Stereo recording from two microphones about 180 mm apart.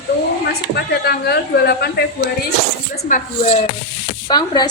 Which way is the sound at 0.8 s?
60° left (ahead or behind).